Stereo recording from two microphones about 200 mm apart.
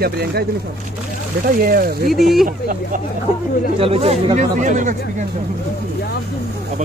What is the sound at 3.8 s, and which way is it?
Speech, 30° right (ahead or behind).